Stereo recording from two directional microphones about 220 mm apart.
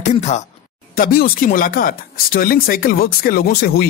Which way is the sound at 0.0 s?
30° left (ahead or behind).